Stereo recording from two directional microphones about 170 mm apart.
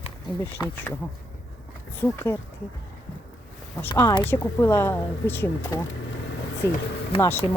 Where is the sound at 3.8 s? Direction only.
15° left (ahead or behind).